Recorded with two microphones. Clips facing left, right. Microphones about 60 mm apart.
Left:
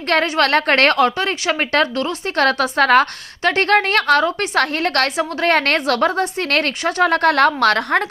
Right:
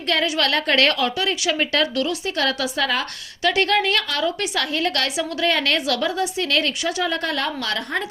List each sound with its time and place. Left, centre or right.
0.1 s a woman's voice: left
2.3 s a woman's voice: left